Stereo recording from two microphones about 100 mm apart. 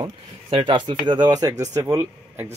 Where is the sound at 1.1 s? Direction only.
45° right (ahead or behind).